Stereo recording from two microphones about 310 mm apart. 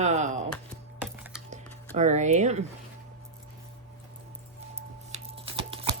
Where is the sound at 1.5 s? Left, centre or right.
Right.